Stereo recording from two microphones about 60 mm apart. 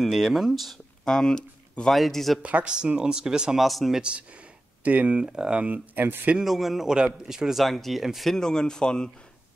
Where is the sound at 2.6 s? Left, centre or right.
Centre.